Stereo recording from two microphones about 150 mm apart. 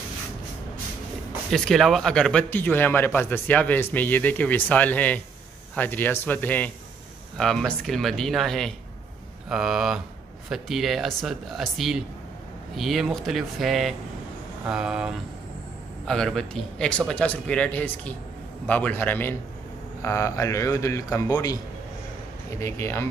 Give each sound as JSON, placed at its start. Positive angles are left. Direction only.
{"t": 1.5, "sound": "a man's voice", "side_deg": 5}